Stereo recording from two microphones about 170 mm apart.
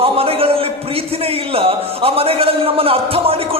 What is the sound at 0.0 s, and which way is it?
A man's voice, 35° right (ahead or behind).